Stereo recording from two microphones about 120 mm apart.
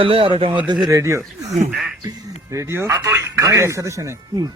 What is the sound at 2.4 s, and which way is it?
Speech, 25° right (ahead or behind).